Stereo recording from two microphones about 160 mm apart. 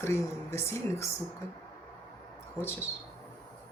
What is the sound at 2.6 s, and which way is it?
Speech, 15° left (ahead or behind).